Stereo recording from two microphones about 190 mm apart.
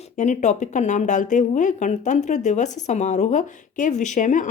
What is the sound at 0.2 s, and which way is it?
A woman's voice, 40° left (ahead or behind).